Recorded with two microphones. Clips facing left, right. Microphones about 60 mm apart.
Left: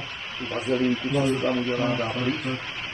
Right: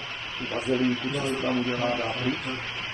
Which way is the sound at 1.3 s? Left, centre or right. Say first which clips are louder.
Left 2 dB; centre.